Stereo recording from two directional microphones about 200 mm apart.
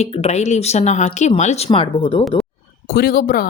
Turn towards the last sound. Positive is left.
turn(degrees=45)  # may be behind; listen again after turning